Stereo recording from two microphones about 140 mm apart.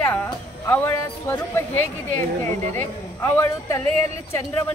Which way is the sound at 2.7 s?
15° left (ahead or behind).